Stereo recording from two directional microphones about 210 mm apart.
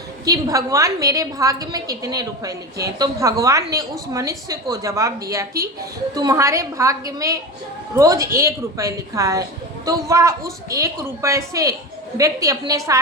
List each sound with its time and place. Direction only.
0.3 s a woman's voice: 15° right (ahead or behind)